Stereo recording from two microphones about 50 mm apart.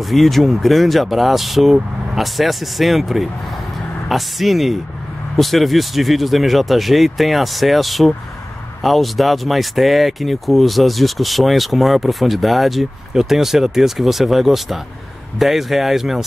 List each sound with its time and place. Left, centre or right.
0.1 s speech: centre